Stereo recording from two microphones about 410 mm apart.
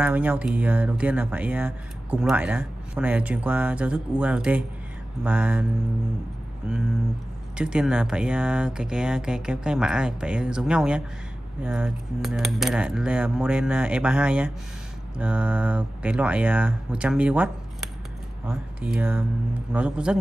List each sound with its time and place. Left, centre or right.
0.0 s speech: centre